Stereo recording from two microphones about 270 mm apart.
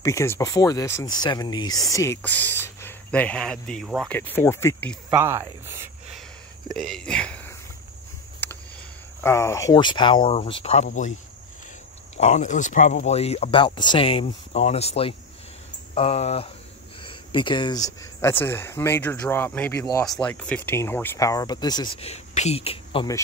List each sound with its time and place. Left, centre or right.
0.0 s speech: centre
5.1 s speech: centre
8.4 s a sound: centre
9.2 s speech: centre; by 11.1 s left
12.2 s speech: left